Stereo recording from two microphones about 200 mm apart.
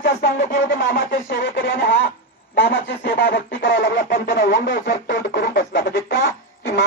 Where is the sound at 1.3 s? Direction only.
65° left (ahead or behind).